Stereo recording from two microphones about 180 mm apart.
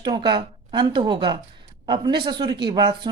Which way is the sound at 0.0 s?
25° right (ahead or behind).